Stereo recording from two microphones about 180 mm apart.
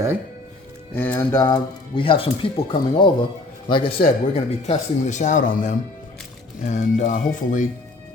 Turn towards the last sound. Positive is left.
turn(degrees=45)  # may be behind; listen again after turning